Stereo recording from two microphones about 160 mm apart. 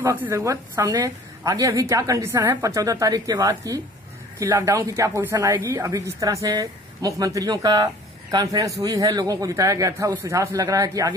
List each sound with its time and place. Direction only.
0.0 s speech: 15° right (ahead or behind)